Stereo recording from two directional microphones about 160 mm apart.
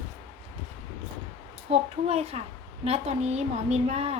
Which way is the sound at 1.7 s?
40° right (ahead or behind).